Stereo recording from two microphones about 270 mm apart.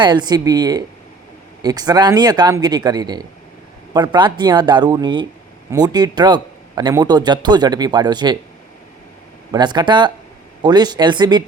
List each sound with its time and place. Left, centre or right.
0.0 s a man's voice: centre
9.5 s a man's voice: centre